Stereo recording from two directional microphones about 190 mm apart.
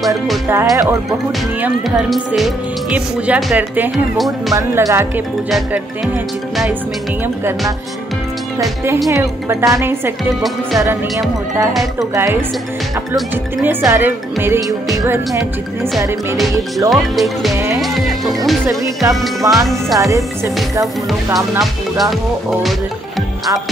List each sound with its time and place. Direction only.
0.5 s speech: 15° right (ahead or behind)
1.1 s speech: centre (ahead or behind)
4.6 s speech: 15° right (ahead or behind)
9.1 s speech: 15° right (ahead or behind)
13.7 s speech: 10° right (ahead or behind)
16.9 s speech: centre (ahead or behind)
21.3 s speech: 20° right (ahead or behind)
21.9 s speech: centre (ahead or behind)